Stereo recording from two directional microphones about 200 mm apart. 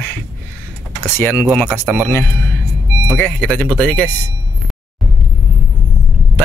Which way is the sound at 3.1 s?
5° left (ahead or behind).